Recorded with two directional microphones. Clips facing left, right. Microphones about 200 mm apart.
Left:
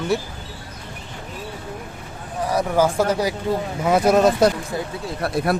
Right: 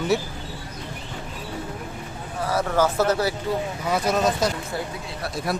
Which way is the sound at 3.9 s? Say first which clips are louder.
Left 7 dB; 55° left (ahead or behind).